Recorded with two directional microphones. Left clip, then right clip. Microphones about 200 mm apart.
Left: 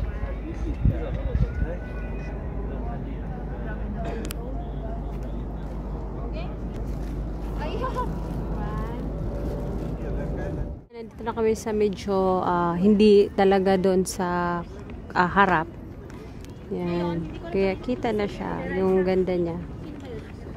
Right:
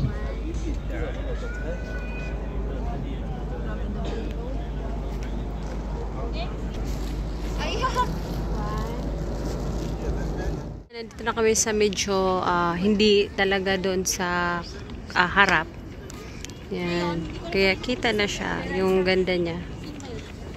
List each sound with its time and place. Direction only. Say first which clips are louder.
7.6 s vehicle: right 4 dB; 30° left (ahead or behind)
11.2 s speech: right 3 dB; 5° left (ahead or behind)
16.7 s speech: right 1 dB; 15° left (ahead or behind)